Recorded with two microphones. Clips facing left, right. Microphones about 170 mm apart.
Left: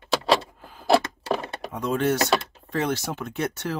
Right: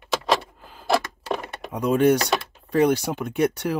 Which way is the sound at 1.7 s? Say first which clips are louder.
Right 6 dB; 15° right (ahead or behind).